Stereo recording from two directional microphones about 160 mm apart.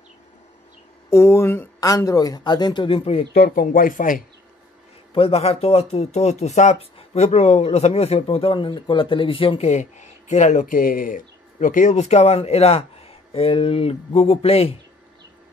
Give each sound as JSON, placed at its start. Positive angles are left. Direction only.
{"t": 1.1, "sound": "speech", "side_deg": 15}
{"t": 3.3, "sound": "speech", "side_deg": 70}
{"t": 5.1, "sound": "speech", "side_deg": 40}